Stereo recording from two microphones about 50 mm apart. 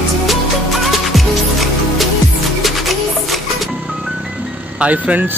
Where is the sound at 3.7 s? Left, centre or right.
Right.